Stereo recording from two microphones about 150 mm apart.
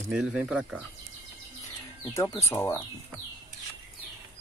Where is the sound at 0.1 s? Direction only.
5° right (ahead or behind).